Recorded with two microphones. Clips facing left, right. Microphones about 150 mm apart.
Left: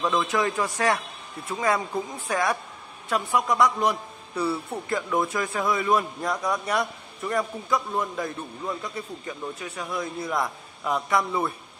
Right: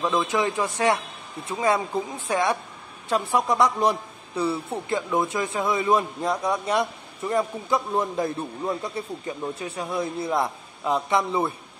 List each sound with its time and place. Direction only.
0.1 s a man's voice: 25° right (ahead or behind)
2.2 s a man's voice: 25° right (ahead or behind)